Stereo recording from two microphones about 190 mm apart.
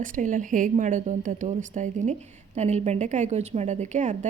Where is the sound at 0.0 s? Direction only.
45° right (ahead or behind).